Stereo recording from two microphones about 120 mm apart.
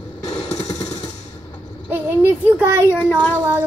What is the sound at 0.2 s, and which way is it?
Machine gun, 65° left (ahead or behind).